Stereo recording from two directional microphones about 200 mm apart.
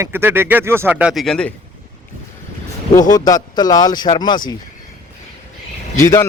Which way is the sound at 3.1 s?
20° left (ahead or behind).